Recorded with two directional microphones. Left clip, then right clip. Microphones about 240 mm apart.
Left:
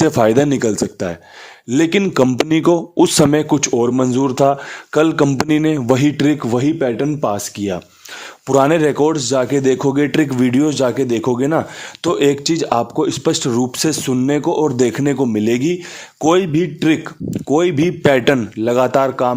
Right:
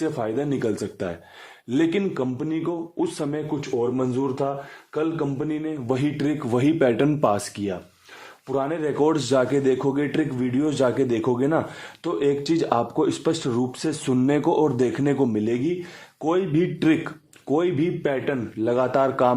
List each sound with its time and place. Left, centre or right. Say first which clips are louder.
0.0 s a man's voice: left 13 dB; left
8.4 s speech: left 12 dB; left
9.0 s a man's voice: left 5 dB; centre
12.0 s a man's voice: left 8 dB; left
14.1 s a man's voice: left 1 dB; centre; by 18.3 s left
18.6 s a man's voice: left 6 dB; left